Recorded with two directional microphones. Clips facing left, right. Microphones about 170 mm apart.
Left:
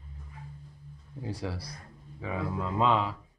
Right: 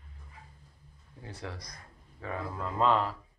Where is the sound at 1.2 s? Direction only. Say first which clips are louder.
Left 6 dB; 10° left (ahead or behind).